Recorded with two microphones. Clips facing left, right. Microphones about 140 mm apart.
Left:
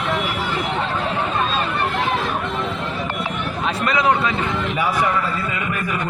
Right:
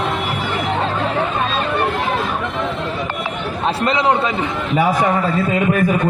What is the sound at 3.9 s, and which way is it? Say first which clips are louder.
Speech: right 1 dB; 25° right (ahead or behind).